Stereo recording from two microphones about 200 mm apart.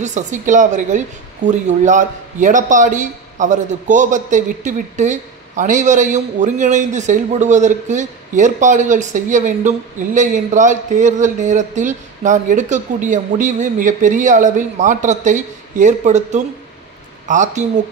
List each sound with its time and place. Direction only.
0.0 s a woman's voice: 35° right (ahead or behind)